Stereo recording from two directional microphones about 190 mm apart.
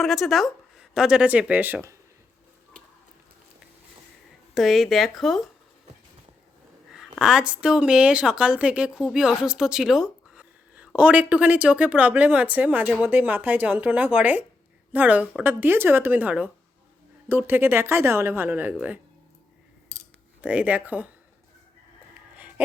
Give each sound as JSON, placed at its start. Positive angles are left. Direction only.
{"t": 0.0, "sound": "speech", "side_deg": 0}
{"t": 4.5, "sound": "speech", "side_deg": 0}
{"t": 6.9, "sound": "speech", "side_deg": 0}
{"t": 20.4, "sound": "speech", "side_deg": -5}
{"t": 22.4, "sound": "a sound", "side_deg": -10}